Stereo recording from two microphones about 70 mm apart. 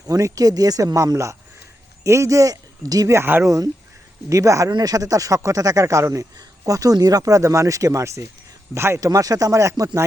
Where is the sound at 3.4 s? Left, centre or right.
Right.